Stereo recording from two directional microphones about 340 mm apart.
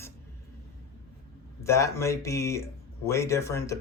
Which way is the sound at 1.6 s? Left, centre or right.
Centre.